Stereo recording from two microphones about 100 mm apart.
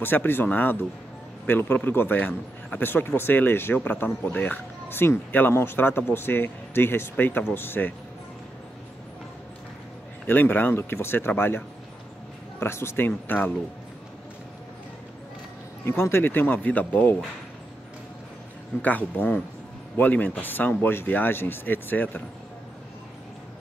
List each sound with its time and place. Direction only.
0.0 s a man's voice: 20° left (ahead or behind)
10.2 s a man's voice: 20° left (ahead or behind)
15.8 s a man's voice: 25° left (ahead or behind)
18.8 s a man's voice: 15° left (ahead or behind)